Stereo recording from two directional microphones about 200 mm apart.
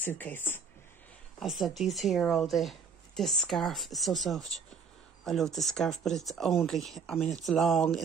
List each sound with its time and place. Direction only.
0.0 s speech: 10° left (ahead or behind)